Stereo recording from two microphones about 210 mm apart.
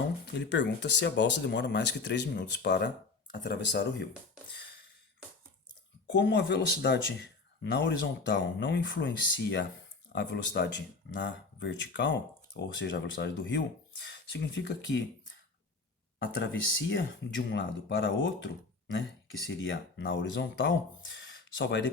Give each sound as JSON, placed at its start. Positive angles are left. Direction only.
{"t": 0.3, "sound": "speech", "side_deg": 55}
{"t": 6.1, "sound": "speech", "side_deg": 60}
{"t": 16.4, "sound": "speech", "side_deg": 60}